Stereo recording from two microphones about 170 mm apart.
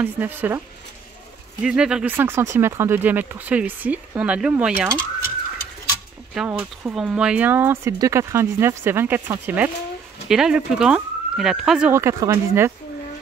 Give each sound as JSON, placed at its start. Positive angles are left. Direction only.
{"t": 0.0, "sound": "speech", "side_deg": -10}
{"t": 1.6, "sound": "speech", "side_deg": -5}
{"t": 6.3, "sound": "speech", "side_deg": -5}
{"t": 11.9, "sound": "speech", "side_deg": -15}